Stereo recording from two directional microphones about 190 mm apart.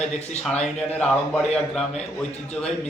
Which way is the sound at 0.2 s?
35° left (ahead or behind).